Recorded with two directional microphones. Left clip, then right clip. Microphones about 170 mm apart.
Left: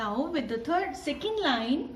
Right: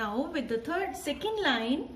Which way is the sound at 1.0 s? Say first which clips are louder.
Left 1 dB; 60° right (ahead or behind).